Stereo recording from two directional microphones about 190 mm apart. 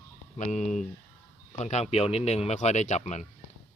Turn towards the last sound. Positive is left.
turn(degrees=40)  # may be behind; listen again after turning